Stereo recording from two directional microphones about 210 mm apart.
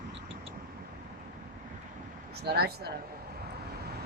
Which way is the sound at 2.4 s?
50° right (ahead or behind).